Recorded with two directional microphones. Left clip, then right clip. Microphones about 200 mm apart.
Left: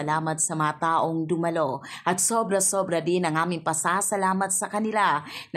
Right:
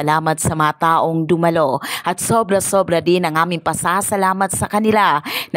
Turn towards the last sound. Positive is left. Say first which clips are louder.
# right 9 dB
turn(degrees=-50)  # may be behind; listen again after turning